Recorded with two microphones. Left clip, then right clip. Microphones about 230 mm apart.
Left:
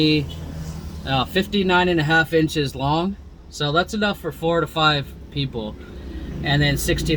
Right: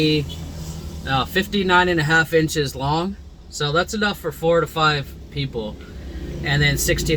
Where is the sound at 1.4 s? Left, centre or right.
Centre.